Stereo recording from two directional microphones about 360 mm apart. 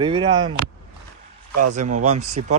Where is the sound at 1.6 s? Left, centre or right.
Right.